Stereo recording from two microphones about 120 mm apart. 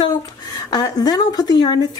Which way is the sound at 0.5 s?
30° left (ahead or behind).